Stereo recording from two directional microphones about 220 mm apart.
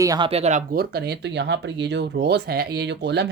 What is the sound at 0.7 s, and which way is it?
Speech, 45° right (ahead or behind).